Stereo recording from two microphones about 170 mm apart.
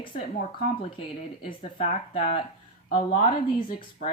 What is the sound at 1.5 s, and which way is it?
A woman's voice, 40° left (ahead or behind).